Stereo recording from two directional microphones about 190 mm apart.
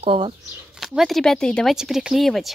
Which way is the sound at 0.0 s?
30° right (ahead or behind).